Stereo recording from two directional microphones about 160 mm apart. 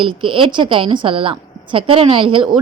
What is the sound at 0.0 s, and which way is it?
A woman's voice, 30° right (ahead or behind).